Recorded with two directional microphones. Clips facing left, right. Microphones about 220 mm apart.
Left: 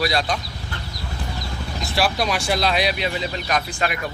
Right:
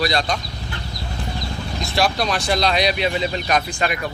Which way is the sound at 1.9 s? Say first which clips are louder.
Right 1 dB; 5° left (ahead or behind).